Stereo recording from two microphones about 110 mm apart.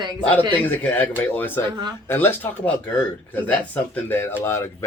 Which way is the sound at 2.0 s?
20° left (ahead or behind).